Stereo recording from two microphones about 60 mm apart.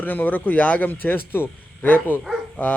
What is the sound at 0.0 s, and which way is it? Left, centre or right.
A man's voice, left.